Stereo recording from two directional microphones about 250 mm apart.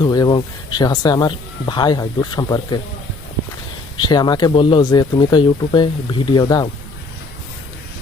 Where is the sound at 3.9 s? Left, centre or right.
Centre.